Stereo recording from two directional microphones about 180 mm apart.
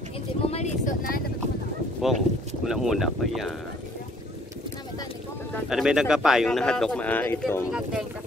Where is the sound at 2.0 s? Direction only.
Centre (ahead or behind).